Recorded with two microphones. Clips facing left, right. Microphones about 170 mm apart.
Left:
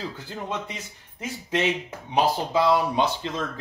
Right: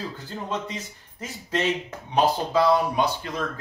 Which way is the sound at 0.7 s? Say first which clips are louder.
Right 3 dB; 15° left (ahead or behind).